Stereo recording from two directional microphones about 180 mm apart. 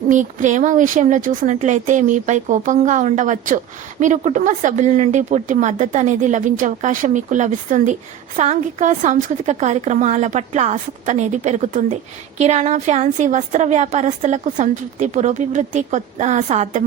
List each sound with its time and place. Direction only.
0.1 s a woman's voice: 45° right (ahead or behind)